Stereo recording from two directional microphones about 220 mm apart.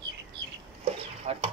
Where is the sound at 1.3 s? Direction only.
30° right (ahead or behind).